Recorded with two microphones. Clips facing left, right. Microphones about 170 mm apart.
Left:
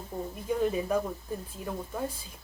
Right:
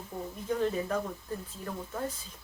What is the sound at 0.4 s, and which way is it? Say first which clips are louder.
A woman's voice: left 2 dB; 10° left (ahead or behind).